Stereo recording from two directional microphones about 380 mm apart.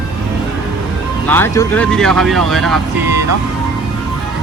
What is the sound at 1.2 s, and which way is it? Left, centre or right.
Speech, centre.